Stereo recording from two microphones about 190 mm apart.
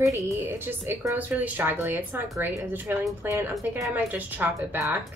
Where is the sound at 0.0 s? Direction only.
15° right (ahead or behind).